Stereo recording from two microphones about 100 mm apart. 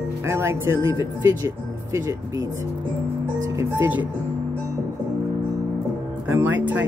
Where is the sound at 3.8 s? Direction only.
15° right (ahead or behind).